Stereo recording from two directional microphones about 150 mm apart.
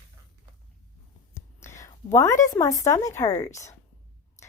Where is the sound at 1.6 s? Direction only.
20° left (ahead or behind).